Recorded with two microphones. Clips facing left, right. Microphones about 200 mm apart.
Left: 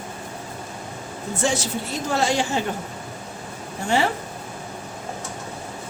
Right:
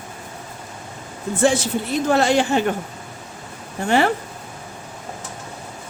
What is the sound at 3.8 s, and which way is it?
Speech, 60° right (ahead or behind).